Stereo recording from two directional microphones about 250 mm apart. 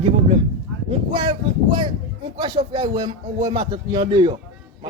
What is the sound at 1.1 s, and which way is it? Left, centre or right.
A man's voice, centre.